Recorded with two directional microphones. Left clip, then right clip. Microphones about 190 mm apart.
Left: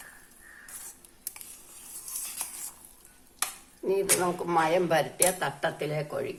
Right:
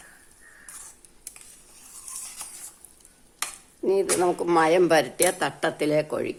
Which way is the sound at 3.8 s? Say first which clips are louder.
Right 4 dB; 50° right (ahead or behind).